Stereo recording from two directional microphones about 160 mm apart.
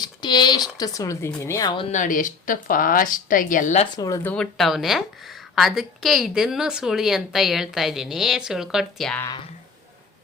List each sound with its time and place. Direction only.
0.0 s speech: 25° left (ahead or behind)
1.9 s speech: 55° left (ahead or behind)
3.9 s speech: 20° left (ahead or behind)
4.2 s speech: 10° left (ahead or behind)
4.5 s a woman's voice: centre (ahead or behind)